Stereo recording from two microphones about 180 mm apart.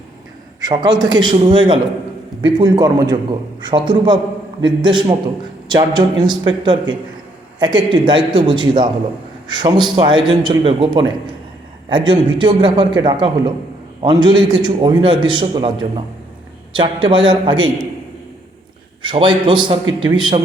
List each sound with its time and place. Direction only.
0.6 s a man's voice: 25° right (ahead or behind)
19.0 s a man's voice: 25° right (ahead or behind)